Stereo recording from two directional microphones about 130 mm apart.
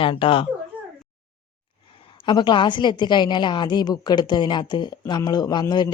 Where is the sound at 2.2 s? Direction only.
35° left (ahead or behind).